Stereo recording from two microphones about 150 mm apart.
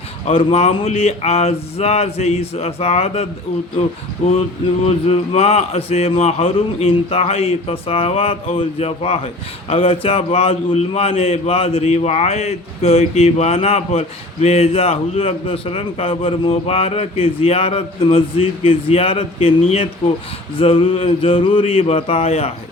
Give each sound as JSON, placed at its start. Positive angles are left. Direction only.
{"t": 0.3, "sound": "a man's voice", "side_deg": 45}